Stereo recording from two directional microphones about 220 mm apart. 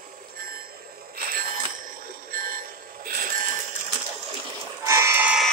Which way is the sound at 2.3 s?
40° right (ahead or behind).